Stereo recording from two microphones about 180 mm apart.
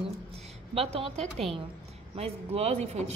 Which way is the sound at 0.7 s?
35° right (ahead or behind).